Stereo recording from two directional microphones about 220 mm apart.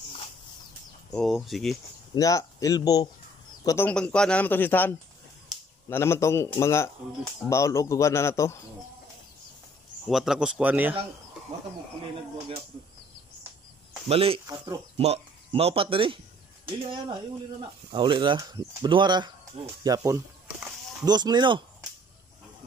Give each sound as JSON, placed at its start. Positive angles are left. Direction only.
{"t": 1.1, "sound": "speech", "side_deg": 0}
{"t": 2.1, "sound": "a man's voice", "side_deg": 15}
{"t": 10.0, "sound": "speech", "side_deg": 0}
{"t": 14.0, "sound": "speech", "side_deg": -25}
{"t": 15.0, "sound": "speech", "side_deg": -30}